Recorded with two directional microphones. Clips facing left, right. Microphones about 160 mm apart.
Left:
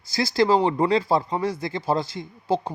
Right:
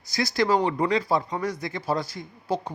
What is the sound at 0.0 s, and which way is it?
Speech, 30° left (ahead or behind).